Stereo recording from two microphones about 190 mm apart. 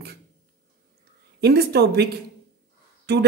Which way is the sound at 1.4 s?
60° right (ahead or behind).